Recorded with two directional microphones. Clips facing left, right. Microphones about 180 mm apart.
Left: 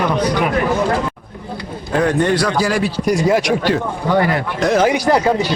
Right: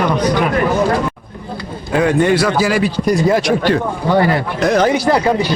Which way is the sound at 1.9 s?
10° right (ahead or behind).